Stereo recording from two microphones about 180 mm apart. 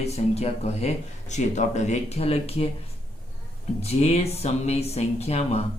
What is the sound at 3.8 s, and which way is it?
Speech, 35° left (ahead or behind).